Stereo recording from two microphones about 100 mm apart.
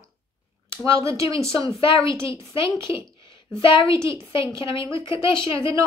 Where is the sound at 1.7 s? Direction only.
70° left (ahead or behind).